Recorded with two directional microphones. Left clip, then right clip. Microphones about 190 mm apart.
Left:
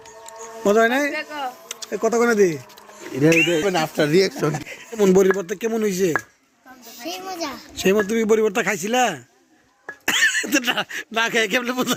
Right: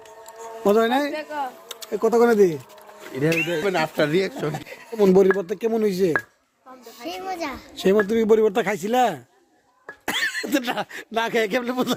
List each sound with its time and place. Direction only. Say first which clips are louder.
0.6 s speech: left 2 dB; centre (ahead or behind)
1.1 s speech: even; 15° left (ahead or behind)
1.6 s a sound: left 3 dB; 25° right (ahead or behind)
1.9 s speech: right 1 dB; centre (ahead or behind)
3.7 s speech: left 2 dB; 40° left (ahead or behind)
4.5 s speech: left 1 dB; centre (ahead or behind)